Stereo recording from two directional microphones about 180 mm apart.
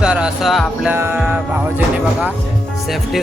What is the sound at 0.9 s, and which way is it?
Music, 10° right (ahead or behind).